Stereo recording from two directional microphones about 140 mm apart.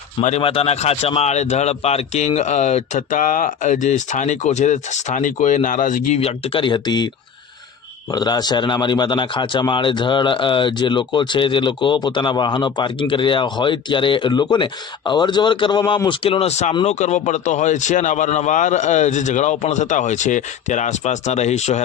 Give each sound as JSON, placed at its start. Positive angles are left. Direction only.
{"t": 0.2, "sound": "speech", "side_deg": 55}
{"t": 0.4, "sound": "speech", "side_deg": 45}
{"t": 6.1, "sound": "speech", "side_deg": 45}
{"t": 8.1, "sound": "speech", "side_deg": 30}